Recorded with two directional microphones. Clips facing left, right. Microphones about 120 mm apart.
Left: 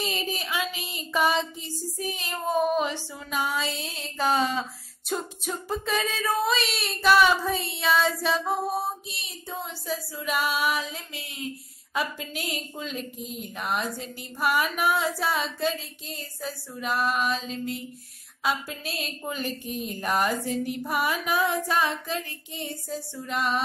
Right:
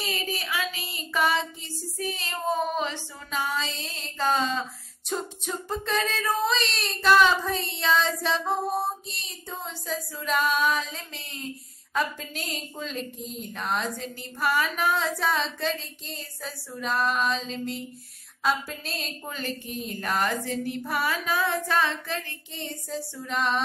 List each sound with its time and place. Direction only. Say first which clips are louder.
0.0 s child singing: left 1 dB; 20° left (ahead or behind)
5.1 s female singing: even; 5° left (ahead or behind)